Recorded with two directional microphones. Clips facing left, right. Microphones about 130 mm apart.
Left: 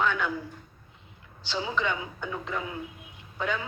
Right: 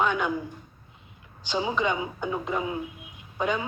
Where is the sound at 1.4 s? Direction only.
20° right (ahead or behind).